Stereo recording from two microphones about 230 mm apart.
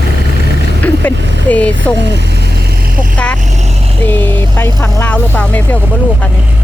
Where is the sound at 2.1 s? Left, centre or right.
Right.